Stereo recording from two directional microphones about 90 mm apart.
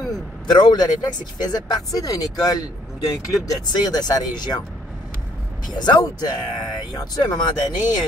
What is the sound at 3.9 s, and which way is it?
Speech, 50° left (ahead or behind).